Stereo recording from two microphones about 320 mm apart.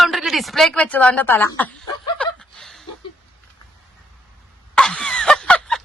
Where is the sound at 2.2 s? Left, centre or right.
Centre.